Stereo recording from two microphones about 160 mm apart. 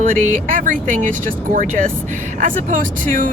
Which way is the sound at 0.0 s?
55° right (ahead or behind).